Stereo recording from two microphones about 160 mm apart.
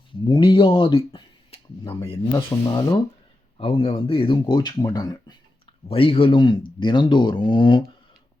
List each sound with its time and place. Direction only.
0.3 s speech: 30° left (ahead or behind)
2.3 s speech: 20° left (ahead or behind)